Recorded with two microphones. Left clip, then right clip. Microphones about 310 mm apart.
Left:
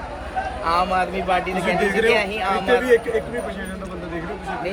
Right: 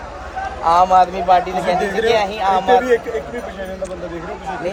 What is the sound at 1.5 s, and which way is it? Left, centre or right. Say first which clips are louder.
Speech: right 2 dB; right.